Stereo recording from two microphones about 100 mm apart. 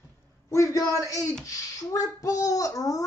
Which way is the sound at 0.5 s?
30° left (ahead or behind).